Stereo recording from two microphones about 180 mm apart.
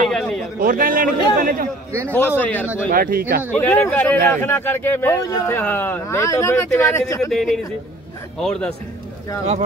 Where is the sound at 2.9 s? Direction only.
50° right (ahead or behind).